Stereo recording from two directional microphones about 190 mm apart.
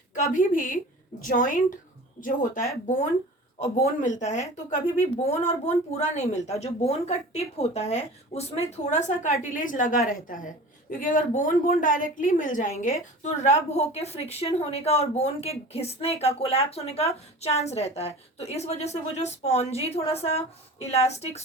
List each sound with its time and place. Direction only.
0.1 s a woman's voice: 45° left (ahead or behind)